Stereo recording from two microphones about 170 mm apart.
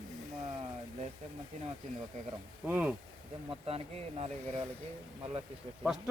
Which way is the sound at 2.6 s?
10° right (ahead or behind).